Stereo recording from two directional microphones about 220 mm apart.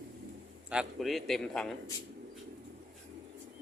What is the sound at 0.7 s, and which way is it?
A man's voice, centre (ahead or behind).